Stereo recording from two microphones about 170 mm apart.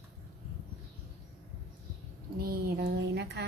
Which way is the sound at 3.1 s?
75° right (ahead or behind).